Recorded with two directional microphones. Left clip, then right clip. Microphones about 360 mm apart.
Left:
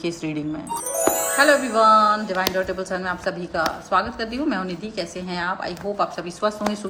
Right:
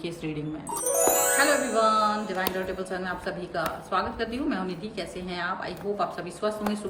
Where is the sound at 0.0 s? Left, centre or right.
Centre.